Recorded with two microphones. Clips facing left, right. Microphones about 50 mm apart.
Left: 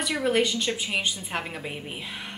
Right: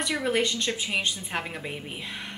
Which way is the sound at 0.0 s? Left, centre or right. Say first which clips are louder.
Left 2 dB; centre.